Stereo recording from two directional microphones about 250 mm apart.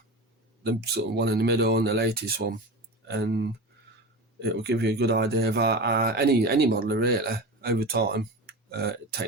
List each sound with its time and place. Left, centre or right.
0.6 s speech: right